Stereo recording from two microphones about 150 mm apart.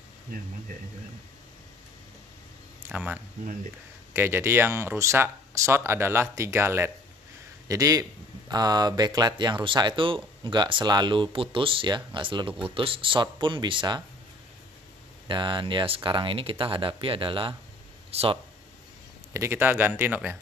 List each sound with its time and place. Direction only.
2.9 s speech: 10° right (ahead or behind); by 14.0 s 30° right (ahead or behind)
15.2 s speech: 30° right (ahead or behind)
19.3 s speech: 15° right (ahead or behind)